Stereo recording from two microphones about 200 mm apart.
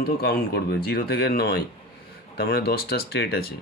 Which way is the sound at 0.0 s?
45° left (ahead or behind).